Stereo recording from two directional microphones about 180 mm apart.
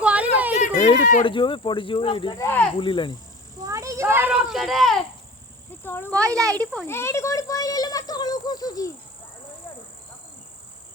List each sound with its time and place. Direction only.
0.0 s a sound: 5° right (ahead or behind)
1.2 s speech: 25° left (ahead or behind)
2.4 s speech: 10° left (ahead or behind)
2.7 s speech: 25° left (ahead or behind)
3.6 s a sound: 20° right (ahead or behind); by 4.9 s centre (ahead or behind)
5.8 s speech: 10° left (ahead or behind)
6.2 s speech: 20° right (ahead or behind)
6.7 s speech: 15° left (ahead or behind)